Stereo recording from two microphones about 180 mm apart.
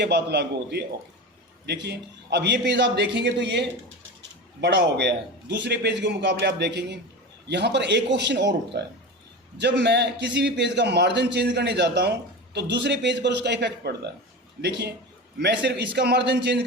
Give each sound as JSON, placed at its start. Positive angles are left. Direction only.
{"t": 0.0, "sound": "a man's voice", "side_deg": -70}
{"t": 9.6, "sound": "a man's voice", "side_deg": -70}